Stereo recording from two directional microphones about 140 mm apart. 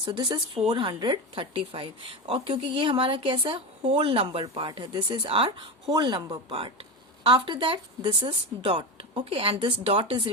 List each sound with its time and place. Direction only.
0.0 s speech: 35° right (ahead or behind)